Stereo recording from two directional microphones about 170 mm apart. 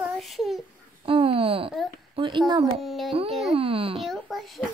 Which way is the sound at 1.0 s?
30° right (ahead or behind).